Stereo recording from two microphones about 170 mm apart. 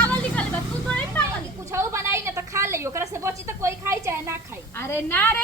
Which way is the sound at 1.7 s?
15° right (ahead or behind).